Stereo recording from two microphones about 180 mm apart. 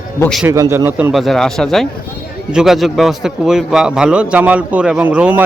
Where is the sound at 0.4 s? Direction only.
15° right (ahead or behind).